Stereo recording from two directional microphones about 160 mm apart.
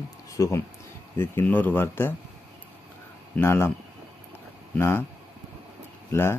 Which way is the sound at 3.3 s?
15° left (ahead or behind).